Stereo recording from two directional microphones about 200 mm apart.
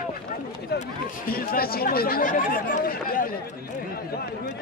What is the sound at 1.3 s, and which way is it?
Speech, 50° left (ahead or behind).